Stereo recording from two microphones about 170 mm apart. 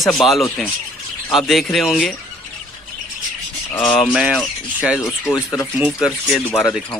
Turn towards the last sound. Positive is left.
turn(degrees=10)  # may be behind; listen again after turning